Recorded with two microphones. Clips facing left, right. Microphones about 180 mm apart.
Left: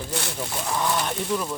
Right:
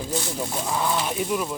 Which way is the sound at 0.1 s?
70° left (ahead or behind).